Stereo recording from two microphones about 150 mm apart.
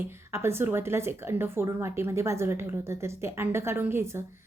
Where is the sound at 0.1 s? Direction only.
15° right (ahead or behind).